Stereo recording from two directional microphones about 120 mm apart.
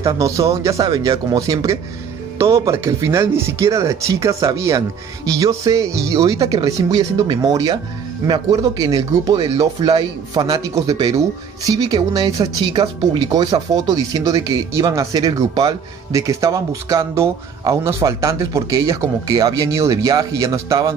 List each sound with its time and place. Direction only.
0.0 s speech: 25° right (ahead or behind)